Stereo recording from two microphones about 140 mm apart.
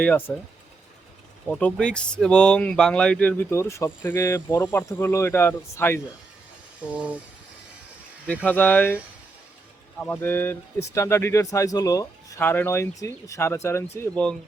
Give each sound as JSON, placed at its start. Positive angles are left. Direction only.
{"t": 0.0, "sound": "speech", "side_deg": 10}
{"t": 1.5, "sound": "speech", "side_deg": 10}
{"t": 6.9, "sound": "a sound", "side_deg": -10}
{"t": 8.4, "sound": "speech", "side_deg": 10}
{"t": 10.0, "sound": "speech", "side_deg": 15}